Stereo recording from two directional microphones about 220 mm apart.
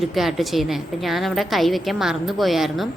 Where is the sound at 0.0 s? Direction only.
Centre (ahead or behind).